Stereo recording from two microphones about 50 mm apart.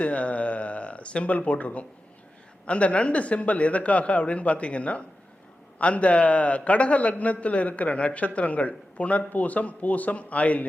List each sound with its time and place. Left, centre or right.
0.0 s a man's voice: left